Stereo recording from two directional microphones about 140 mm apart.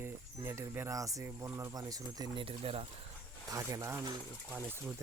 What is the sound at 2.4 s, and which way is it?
Speech, 45° right (ahead or behind).